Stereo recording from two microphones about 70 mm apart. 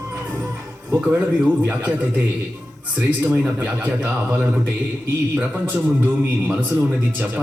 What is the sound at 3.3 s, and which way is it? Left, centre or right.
Speech, right.